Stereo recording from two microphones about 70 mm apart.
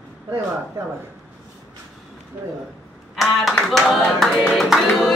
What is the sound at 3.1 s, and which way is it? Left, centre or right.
Music, centre.